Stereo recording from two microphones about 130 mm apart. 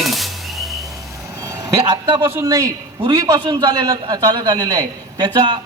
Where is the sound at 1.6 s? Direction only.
30° right (ahead or behind).